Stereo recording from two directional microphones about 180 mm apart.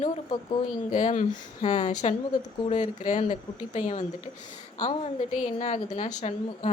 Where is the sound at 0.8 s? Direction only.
40° left (ahead or behind).